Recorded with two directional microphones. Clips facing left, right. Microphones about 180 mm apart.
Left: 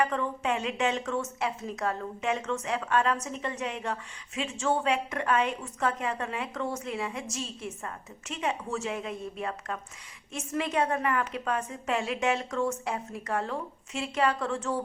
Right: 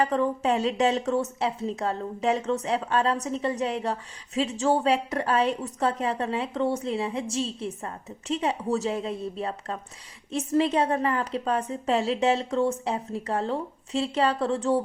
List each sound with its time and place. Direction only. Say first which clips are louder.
0.0 s a woman's voice: right 5 dB; 35° right (ahead or behind)